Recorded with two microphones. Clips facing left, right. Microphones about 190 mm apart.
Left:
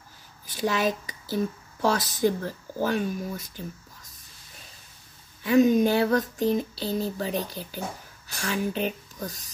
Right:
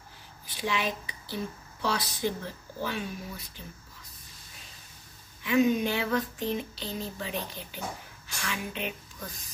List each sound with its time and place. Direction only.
0.5 s speech: 40° left (ahead or behind)
5.4 s a sound: 40° left (ahead or behind)
8.4 s speech: 35° left (ahead or behind)